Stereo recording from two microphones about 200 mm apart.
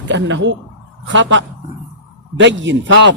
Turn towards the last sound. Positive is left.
turn(degrees=-65)  # may be behind; listen again after turning